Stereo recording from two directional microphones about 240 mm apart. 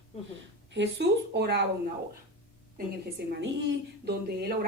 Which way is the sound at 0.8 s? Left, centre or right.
Right.